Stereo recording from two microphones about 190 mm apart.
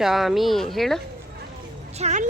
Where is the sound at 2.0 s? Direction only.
35° right (ahead or behind).